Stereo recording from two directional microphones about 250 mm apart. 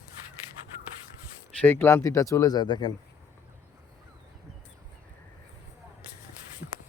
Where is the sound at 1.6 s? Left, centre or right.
Centre.